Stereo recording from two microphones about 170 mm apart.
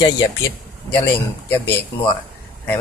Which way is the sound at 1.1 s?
10° left (ahead or behind).